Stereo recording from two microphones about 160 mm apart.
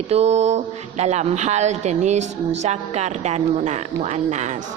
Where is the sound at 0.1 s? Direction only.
40° right (ahead or behind).